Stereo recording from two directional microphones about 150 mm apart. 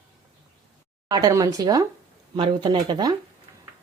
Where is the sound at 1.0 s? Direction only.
25° right (ahead or behind).